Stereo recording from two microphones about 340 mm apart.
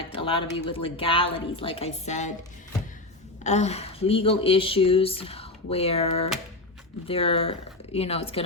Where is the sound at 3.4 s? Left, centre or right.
Centre.